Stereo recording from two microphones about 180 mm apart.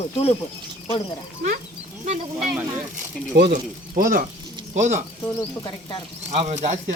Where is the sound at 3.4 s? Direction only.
50° right (ahead or behind).